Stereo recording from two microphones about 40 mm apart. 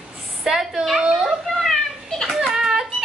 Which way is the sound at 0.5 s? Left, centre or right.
Centre.